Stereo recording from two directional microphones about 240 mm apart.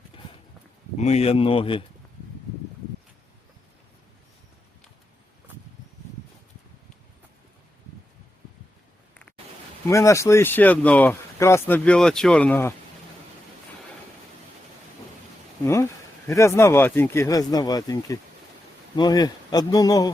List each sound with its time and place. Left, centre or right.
0.9 s speech: left
9.8 s speech: centre
15.6 s speech: centre